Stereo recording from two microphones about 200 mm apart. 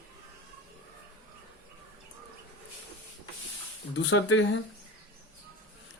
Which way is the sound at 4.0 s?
65° left (ahead or behind).